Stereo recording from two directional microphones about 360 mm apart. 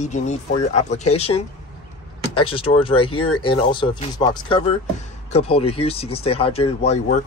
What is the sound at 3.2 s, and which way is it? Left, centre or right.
Speech, left.